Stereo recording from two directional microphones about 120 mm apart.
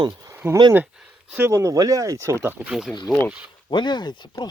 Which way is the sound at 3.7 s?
40° left (ahead or behind).